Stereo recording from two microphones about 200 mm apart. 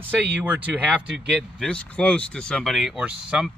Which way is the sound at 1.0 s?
60° right (ahead or behind).